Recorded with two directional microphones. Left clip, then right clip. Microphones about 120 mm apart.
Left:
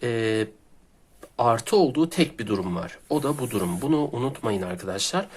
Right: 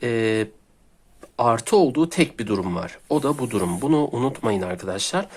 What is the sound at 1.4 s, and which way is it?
Speech, 25° right (ahead or behind).